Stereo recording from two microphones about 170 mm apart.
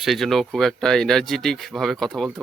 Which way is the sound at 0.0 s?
Centre (ahead or behind).